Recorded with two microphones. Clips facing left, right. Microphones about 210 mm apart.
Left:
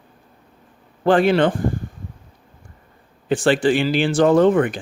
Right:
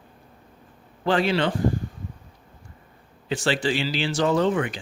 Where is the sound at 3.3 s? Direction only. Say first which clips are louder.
Left 7 dB; 50° left (ahead or behind).